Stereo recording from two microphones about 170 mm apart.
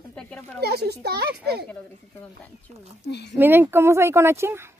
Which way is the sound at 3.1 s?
80° left.